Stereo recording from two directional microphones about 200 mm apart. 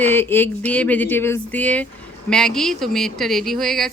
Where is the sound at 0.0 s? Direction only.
10° left (ahead or behind).